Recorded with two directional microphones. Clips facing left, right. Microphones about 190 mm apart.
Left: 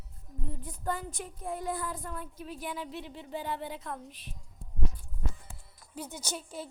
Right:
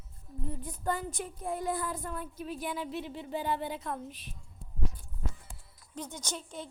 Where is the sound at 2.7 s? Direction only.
10° right (ahead or behind).